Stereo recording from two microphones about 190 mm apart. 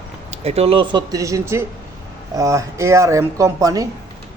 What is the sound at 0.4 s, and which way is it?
A man's voice, 30° right (ahead or behind).